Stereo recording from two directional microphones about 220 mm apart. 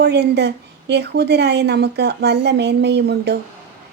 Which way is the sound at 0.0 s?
50° right (ahead or behind).